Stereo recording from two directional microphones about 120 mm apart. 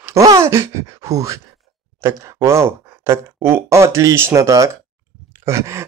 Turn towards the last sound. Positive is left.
turn(degrees=-25)  # may be behind; listen again after turning